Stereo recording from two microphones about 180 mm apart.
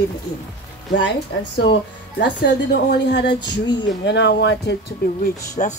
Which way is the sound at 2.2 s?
70° left (ahead or behind).